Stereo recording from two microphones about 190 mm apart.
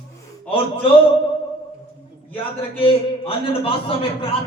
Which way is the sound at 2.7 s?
30° left (ahead or behind).